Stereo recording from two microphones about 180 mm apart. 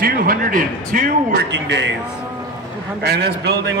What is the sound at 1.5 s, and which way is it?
Speech, 80° right.